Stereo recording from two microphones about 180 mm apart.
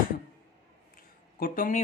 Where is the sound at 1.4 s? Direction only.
50° left (ahead or behind).